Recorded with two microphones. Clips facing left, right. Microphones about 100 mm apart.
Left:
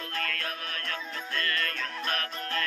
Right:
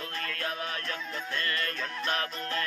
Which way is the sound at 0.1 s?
25° right (ahead or behind).